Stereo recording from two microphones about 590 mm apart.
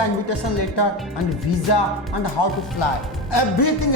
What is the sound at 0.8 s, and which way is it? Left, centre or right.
Speech, left.